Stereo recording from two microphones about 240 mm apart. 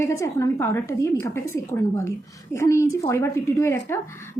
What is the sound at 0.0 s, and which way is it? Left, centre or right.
A woman's voice, centre.